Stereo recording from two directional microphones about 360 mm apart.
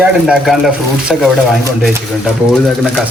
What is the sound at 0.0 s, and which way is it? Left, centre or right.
Speech, centre.